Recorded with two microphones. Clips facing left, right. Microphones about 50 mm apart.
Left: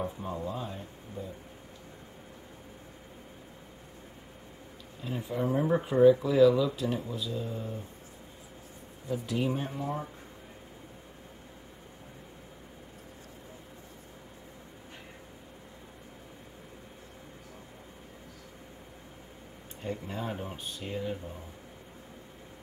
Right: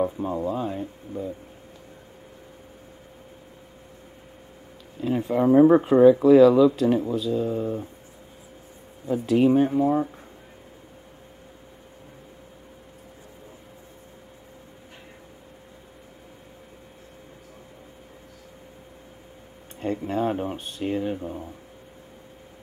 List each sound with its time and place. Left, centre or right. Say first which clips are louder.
0.0 s speech: right 9 dB; right
5.0 s speech: right 11 dB; right
5.8 s speech: right 8 dB; right
6.2 s speech: right 9 dB; right
9.0 s speech: right 11 dB; right
9.5 s speech: right 14 dB; right
19.8 s speech: right 11 dB; right